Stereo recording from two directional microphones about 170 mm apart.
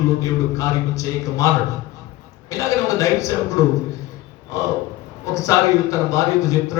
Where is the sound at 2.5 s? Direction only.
20° left (ahead or behind).